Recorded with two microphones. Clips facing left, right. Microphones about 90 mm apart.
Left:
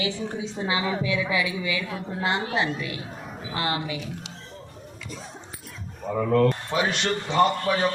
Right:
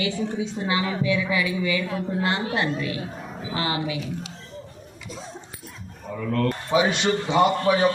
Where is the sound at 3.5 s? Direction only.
5° right (ahead or behind).